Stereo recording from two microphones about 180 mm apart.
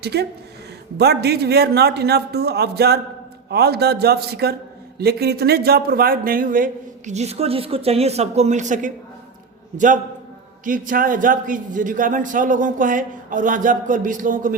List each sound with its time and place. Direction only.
0.0 s a man's voice: 65° right (ahead or behind); by 14.5 s 50° right (ahead or behind)